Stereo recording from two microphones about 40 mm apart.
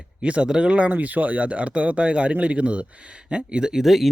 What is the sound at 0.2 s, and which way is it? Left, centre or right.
Speech, right.